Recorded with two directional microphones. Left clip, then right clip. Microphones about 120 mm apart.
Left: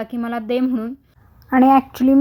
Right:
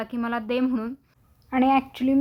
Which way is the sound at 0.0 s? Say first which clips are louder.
Left 3 dB; 40° left (ahead or behind).